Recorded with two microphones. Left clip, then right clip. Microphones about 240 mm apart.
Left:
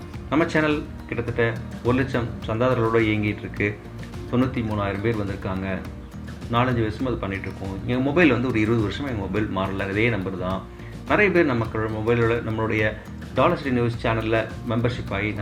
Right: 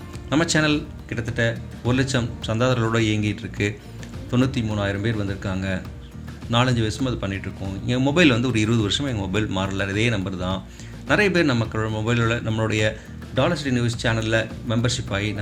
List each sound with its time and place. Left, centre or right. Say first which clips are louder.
0.3 s speech: right 1 dB; right